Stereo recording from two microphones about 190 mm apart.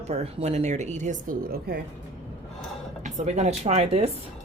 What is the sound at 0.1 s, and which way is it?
Speech, 35° right (ahead or behind).